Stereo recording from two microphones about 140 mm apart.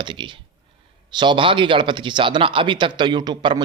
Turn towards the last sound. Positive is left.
turn(degrees=-35)  # may be behind; listen again after turning